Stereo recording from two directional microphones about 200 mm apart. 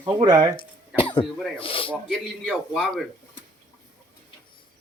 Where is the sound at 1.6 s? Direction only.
25° left (ahead or behind).